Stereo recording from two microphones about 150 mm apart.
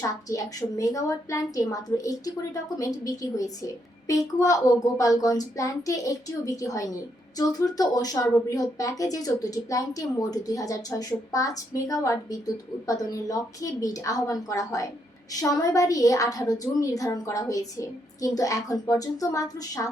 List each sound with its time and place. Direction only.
0.0 s speech: 20° left (ahead or behind)